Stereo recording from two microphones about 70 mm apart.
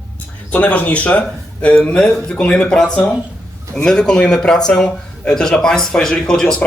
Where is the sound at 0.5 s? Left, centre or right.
Left.